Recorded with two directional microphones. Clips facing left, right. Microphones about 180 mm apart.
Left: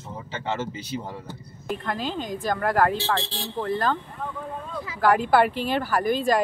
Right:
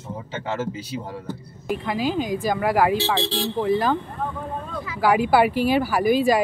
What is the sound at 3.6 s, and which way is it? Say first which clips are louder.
Speech: right 4 dB; 10° right (ahead or behind).